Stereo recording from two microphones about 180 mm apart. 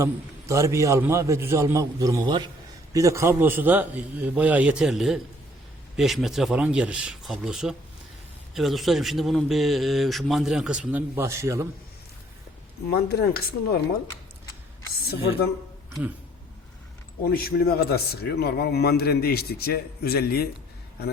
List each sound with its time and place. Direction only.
0.0 s a man's voice: 15° right (ahead or behind)
12.9 s a man's voice: 60° left (ahead or behind)
17.2 s a man's voice: 55° left (ahead or behind)